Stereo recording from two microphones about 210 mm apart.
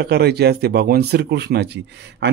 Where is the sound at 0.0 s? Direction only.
50° right (ahead or behind).